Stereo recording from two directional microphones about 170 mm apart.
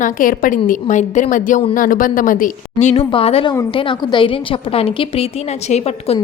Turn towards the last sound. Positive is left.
turn(degrees=35)  # may be behind; listen again after turning